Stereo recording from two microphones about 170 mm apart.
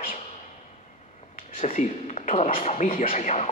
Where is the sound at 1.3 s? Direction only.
50° left (ahead or behind).